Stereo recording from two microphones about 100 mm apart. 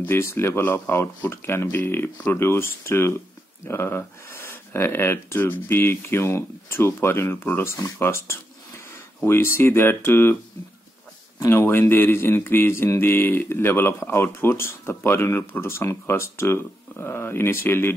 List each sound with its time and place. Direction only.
0.0 s speech: 25° left (ahead or behind)
11.3 s speech: 25° left (ahead or behind)